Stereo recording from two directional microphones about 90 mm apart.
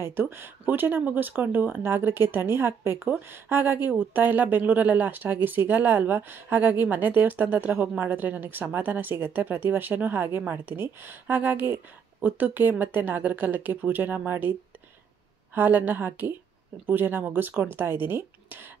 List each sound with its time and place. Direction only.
0.0 s speech: 25° right (ahead or behind)
15.5 s speech: 20° right (ahead or behind)